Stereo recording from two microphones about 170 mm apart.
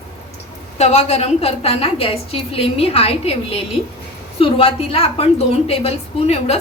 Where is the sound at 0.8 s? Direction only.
40° left (ahead or behind).